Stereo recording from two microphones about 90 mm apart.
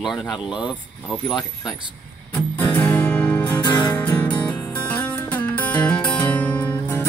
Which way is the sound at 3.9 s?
20° left (ahead or behind).